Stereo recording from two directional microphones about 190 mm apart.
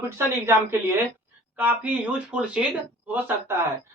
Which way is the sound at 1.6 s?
5° right (ahead or behind).